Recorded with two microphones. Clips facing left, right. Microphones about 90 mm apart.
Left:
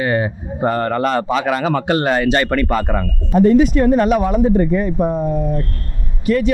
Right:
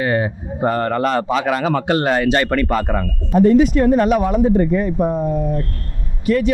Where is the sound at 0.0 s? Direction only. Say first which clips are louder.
Even; 25° left (ahead or behind).